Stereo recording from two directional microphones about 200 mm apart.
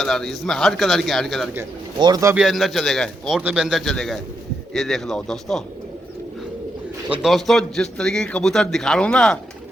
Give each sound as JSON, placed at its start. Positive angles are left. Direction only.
{"t": 0.0, "sound": "a man's voice", "side_deg": 0}
{"t": 2.0, "sound": "speech", "side_deg": -20}
{"t": 2.3, "sound": "a man's voice", "side_deg": 0}
{"t": 7.1, "sound": "a man's voice", "side_deg": 0}